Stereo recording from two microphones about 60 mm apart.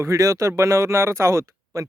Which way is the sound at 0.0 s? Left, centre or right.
Right.